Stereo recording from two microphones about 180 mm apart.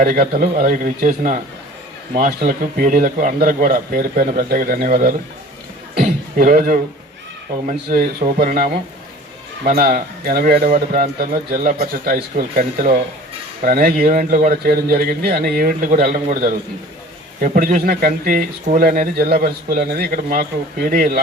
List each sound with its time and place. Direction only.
0.0 s speech: 50° right (ahead or behind)
6.0 s throat clearing: 50° right (ahead or behind)
7.7 s speech: 55° right (ahead or behind)